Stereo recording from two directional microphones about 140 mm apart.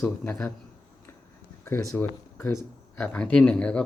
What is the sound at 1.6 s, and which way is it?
Speech, 20° left (ahead or behind).